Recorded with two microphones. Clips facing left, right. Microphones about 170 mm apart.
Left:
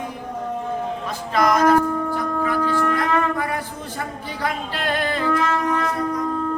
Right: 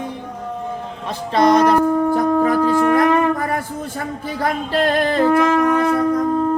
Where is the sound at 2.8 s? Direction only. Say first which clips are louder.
Right 6 dB; 50° right (ahead or behind).